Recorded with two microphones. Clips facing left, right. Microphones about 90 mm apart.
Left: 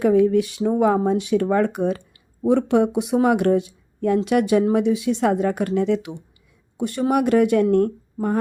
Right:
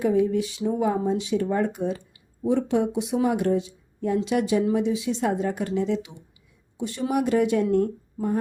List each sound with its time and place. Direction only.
0.0 s speech: 60° left (ahead or behind)